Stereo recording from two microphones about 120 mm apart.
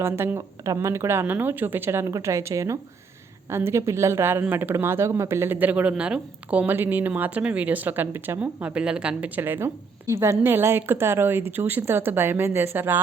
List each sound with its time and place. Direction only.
0.0 s speech: 20° right (ahead or behind)